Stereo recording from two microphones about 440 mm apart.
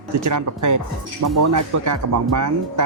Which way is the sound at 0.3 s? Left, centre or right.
Right.